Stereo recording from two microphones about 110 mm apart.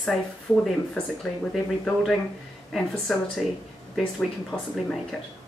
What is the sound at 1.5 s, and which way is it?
A woman's voice, centre (ahead or behind).